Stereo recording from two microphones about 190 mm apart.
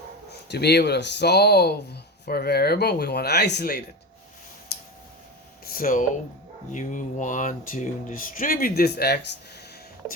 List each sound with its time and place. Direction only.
0.5 s speech: 60° left (ahead or behind)
5.6 s speech: 50° left (ahead or behind)